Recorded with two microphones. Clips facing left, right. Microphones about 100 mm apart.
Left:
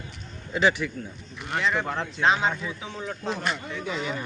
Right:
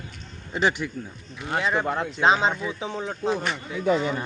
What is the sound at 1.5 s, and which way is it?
Speech, 20° right (ahead or behind).